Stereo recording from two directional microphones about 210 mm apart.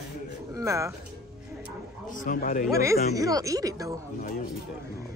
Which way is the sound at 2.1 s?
40° left (ahead or behind).